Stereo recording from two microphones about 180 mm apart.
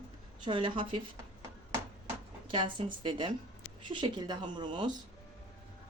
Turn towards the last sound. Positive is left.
turn(degrees=-25)  # may be behind; listen again after turning